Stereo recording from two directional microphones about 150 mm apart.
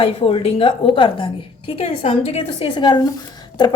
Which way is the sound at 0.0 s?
40° left (ahead or behind).